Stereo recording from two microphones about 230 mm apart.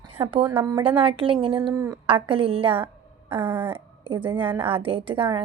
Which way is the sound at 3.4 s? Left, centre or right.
Centre.